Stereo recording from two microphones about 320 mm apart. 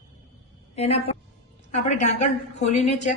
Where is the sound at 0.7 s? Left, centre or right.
Centre.